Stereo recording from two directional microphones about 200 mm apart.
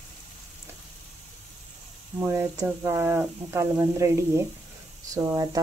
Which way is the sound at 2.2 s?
15° right (ahead or behind).